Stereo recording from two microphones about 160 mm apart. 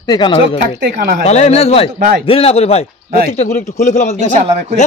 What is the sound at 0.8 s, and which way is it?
Speech, 90° right.